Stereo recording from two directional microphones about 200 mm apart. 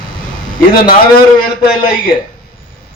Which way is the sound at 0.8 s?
50° left (ahead or behind).